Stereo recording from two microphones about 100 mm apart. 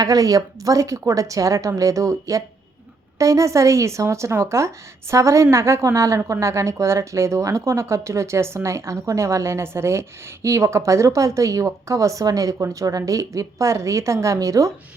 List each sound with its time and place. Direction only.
0.0 s a woman's voice: 35° right (ahead or behind)